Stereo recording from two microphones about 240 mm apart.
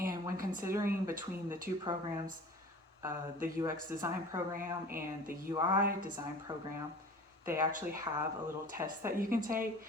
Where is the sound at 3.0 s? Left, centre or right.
Centre.